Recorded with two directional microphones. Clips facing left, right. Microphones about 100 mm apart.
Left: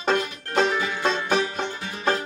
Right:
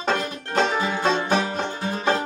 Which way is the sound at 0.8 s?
30° right (ahead or behind).